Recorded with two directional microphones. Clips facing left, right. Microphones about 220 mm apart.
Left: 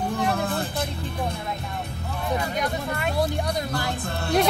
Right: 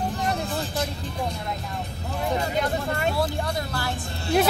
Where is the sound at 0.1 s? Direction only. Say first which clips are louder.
Left 3 dB; 55° left (ahead or behind).